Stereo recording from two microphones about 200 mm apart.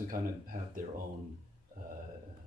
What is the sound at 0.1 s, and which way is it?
Speech, 45° right (ahead or behind).